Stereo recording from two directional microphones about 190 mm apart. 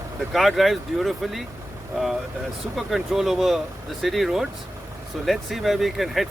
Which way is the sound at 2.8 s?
Centre (ahead or behind).